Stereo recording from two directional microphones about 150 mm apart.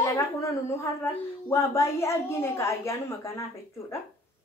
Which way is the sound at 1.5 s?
20° left (ahead or behind).